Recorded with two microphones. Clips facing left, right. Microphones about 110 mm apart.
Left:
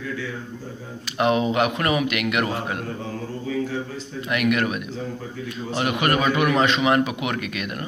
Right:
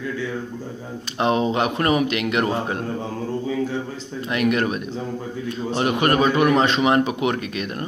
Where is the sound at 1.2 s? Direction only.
30° right (ahead or behind).